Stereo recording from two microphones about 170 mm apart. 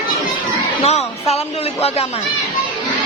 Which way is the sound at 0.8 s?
40° left (ahead or behind).